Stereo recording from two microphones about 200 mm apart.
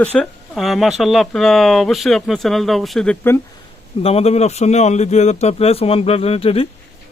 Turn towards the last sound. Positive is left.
turn(degrees=30)  # may be behind; listen again after turning